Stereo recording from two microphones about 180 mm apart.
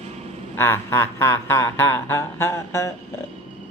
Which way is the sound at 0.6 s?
15° left (ahead or behind).